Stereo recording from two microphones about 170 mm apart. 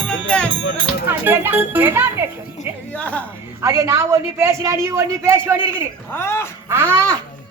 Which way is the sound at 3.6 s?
15° right (ahead or behind).